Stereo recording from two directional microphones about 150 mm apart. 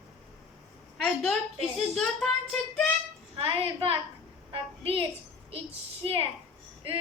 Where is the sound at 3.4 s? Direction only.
40° right (ahead or behind).